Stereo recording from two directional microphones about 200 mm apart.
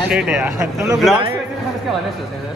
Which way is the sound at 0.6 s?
15° right (ahead or behind).